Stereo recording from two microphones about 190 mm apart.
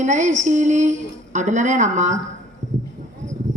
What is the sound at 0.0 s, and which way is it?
A woman's voice, 40° right (ahead or behind).